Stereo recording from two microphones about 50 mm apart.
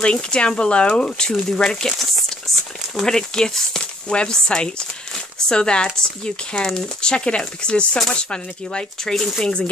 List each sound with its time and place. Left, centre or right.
0.0 s speech: centre